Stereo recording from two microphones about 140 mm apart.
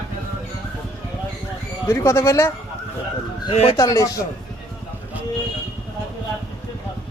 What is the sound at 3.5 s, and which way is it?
Speech, 45° left (ahead or behind).